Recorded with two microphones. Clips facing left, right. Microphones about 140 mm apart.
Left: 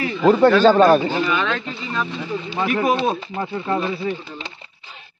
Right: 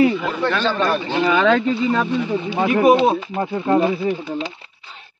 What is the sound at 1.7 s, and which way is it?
Speech, 50° right (ahead or behind).